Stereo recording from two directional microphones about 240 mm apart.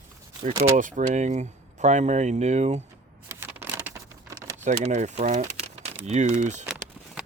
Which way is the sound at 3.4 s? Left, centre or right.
Centre.